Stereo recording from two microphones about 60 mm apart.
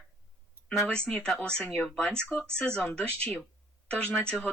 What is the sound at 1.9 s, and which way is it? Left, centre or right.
Speech, centre.